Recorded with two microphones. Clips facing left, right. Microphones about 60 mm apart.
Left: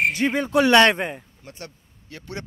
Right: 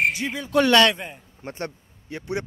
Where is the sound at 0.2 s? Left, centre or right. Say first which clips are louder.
Left 7 dB; left.